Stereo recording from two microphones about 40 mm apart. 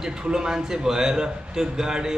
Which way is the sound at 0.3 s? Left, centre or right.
Centre.